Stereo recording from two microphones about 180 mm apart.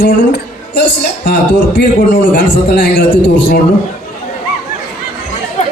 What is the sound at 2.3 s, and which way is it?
Speech, 70° left (ahead or behind).